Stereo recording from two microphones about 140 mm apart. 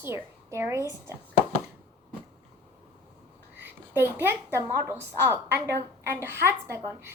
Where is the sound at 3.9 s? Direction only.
15° right (ahead or behind).